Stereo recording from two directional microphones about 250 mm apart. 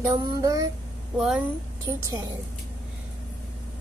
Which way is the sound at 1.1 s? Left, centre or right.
Centre.